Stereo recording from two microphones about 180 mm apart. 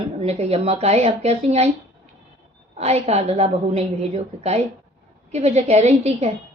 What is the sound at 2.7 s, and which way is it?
Speech, 35° right (ahead or behind).